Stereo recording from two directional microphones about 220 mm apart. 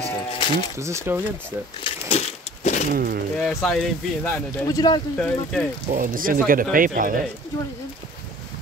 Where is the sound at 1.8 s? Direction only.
30° left (ahead or behind).